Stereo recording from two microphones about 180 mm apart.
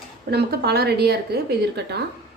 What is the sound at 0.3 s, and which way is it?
A woman's voice, 65° right (ahead or behind).